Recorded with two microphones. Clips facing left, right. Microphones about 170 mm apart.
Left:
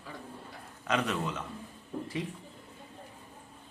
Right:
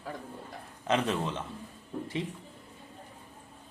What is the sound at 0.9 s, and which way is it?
Speech, 25° right (ahead or behind).